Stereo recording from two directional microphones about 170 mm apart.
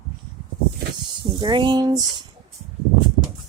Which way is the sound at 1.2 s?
25° right (ahead or behind).